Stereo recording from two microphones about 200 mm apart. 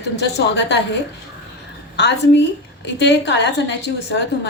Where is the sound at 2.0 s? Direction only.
60° left (ahead or behind).